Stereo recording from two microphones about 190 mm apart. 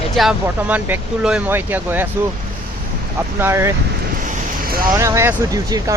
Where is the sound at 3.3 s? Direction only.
15° right (ahead or behind).